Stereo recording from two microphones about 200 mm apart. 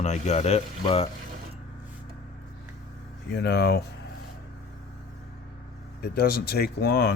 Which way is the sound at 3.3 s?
55° left (ahead or behind).